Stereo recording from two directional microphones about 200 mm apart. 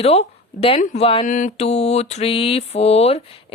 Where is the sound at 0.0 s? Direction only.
30° left (ahead or behind).